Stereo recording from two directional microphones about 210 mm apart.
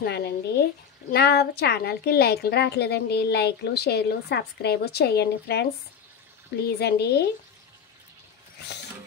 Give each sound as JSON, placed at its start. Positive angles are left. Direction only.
{"t": 0.0, "sound": "a woman's voice", "side_deg": 50}
{"t": 6.8, "sound": "a woman's voice", "side_deg": 50}